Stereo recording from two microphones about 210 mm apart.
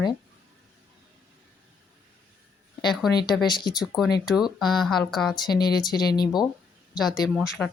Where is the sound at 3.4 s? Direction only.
20° left (ahead or behind).